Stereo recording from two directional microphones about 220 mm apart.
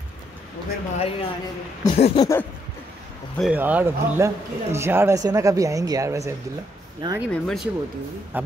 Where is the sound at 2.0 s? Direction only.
30° left (ahead or behind).